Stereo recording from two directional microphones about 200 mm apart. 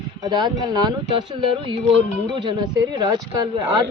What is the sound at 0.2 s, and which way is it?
Speech, 20° right (ahead or behind).